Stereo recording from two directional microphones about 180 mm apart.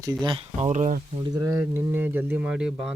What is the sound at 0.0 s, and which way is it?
Speech, 20° right (ahead or behind).